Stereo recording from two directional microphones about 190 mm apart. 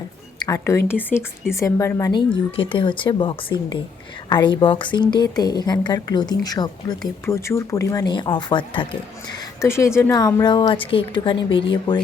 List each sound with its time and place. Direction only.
0.3 s speech: 20° left (ahead or behind)
9.6 s speech: 15° left (ahead or behind)